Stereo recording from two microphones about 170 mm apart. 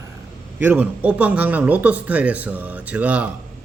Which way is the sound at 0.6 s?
10° right (ahead or behind).